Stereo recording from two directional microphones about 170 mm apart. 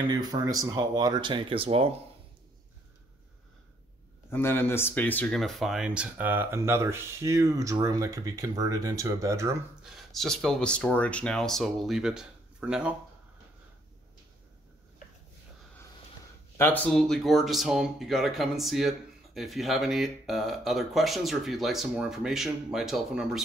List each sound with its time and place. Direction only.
0.1 s speech: 20° right (ahead or behind)
4.3 s speech: 15° left (ahead or behind); by 9.6 s 15° right (ahead or behind)
9.8 s speech: centre (ahead or behind)
16.5 s speech: 10° left (ahead or behind)